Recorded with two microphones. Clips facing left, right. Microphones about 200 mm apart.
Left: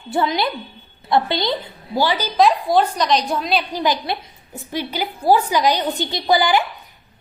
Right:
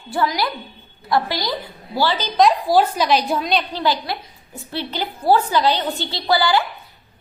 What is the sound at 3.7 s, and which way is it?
A woman's voice, 15° left (ahead or behind).